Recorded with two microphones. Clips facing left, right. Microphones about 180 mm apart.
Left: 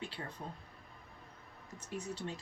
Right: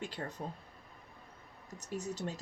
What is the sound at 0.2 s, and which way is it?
Speech, 40° right (ahead or behind).